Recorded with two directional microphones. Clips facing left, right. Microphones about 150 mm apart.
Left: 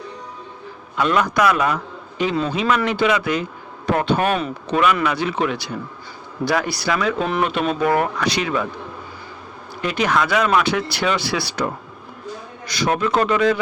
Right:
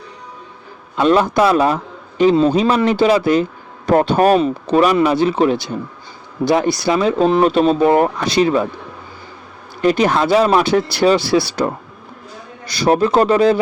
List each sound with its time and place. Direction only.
0.9 s a man's voice: 30° right (ahead or behind)
9.8 s a man's voice: 35° right (ahead or behind)